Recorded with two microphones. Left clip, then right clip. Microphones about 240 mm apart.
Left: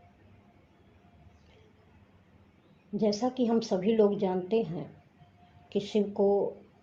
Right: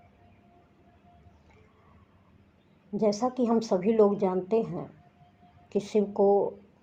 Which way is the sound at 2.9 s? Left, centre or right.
Right.